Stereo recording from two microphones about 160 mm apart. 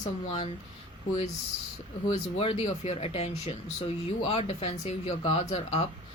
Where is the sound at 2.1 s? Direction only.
40° left (ahead or behind).